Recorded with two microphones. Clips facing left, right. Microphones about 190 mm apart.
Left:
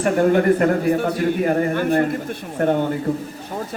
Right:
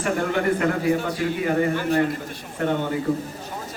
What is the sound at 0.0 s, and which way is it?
A man's voice, 45° left (ahead or behind).